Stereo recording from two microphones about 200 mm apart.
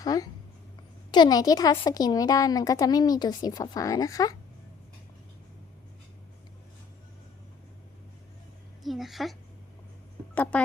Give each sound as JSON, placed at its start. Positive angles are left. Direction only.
{"t": 0.0, "sound": "speech", "side_deg": 20}
{"t": 8.8, "sound": "a sound", "side_deg": 0}
{"t": 10.3, "sound": "speech", "side_deg": 5}